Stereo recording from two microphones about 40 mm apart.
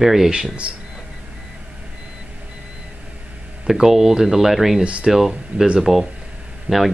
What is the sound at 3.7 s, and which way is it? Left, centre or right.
Speech, centre.